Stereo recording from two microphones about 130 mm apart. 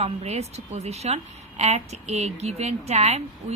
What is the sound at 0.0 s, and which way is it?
A woman's voice, 55° right (ahead or behind).